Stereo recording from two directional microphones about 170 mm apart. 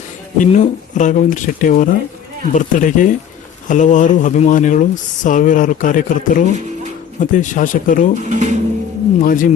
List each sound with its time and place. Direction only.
0.3 s speech: 45° left (ahead or behind)
8.3 s speech: 45° right (ahead or behind)
9.2 s speech: 50° left (ahead or behind)